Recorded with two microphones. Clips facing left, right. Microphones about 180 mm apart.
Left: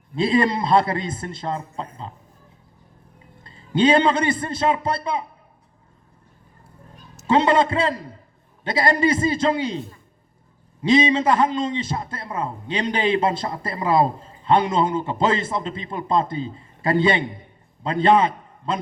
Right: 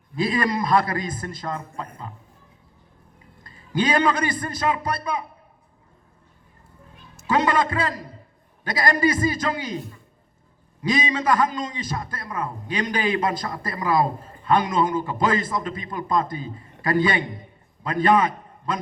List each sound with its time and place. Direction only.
0.2 s a man's voice: 25° left (ahead or behind)
3.4 s a man's voice: 25° left (ahead or behind)
7.3 s a man's voice: 25° left (ahead or behind)
10.8 s a man's voice: 25° left (ahead or behind)